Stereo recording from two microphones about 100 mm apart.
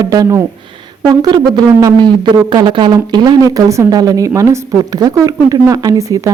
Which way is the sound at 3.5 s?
35° right (ahead or behind).